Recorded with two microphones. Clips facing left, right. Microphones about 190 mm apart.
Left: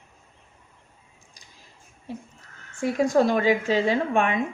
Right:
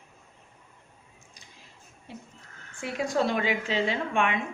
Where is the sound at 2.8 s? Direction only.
45° left (ahead or behind).